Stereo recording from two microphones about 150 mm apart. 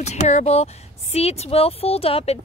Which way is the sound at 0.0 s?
50° left (ahead or behind).